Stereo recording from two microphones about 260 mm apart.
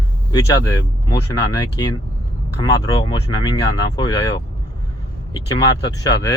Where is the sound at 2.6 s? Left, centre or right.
Centre.